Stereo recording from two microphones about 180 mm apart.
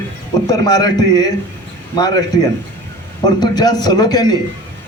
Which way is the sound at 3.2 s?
20° left (ahead or behind).